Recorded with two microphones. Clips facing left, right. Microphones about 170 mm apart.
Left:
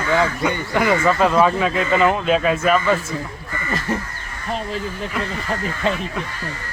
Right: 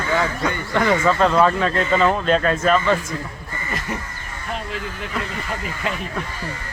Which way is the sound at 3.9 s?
25° left (ahead or behind).